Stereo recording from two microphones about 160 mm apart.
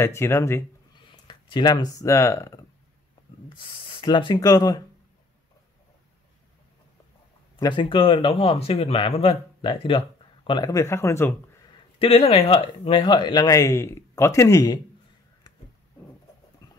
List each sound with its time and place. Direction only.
0.0 s speech: 15° left (ahead or behind)
1.0 s speech: 30° left (ahead or behind)
3.4 s speech: 30° left (ahead or behind)
7.7 s speech: 30° left (ahead or behind)
12.0 s speech: 35° left (ahead or behind); by 14.8 s 20° left (ahead or behind)